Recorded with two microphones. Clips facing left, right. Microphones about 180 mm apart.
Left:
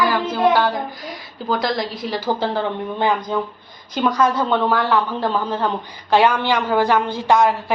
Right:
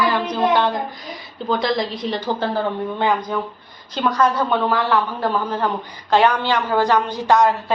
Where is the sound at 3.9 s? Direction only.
10° left (ahead or behind).